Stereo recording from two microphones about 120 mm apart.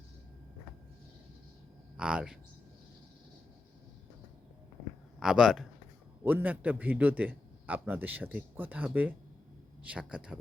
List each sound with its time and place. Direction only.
2.0 s a man's voice: 5° right (ahead or behind)
5.2 s a man's voice: 5° right (ahead or behind)
6.2 s a man's voice: 15° right (ahead or behind)